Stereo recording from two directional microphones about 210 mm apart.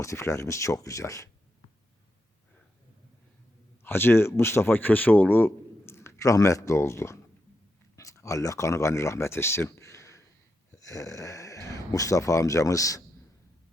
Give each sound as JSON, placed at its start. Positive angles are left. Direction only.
{"t": 0.0, "sound": "speech", "side_deg": 15}
{"t": 3.8, "sound": "speech", "side_deg": 10}